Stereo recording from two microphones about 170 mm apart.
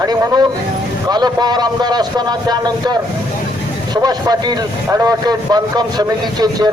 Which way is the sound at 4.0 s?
25° right (ahead or behind).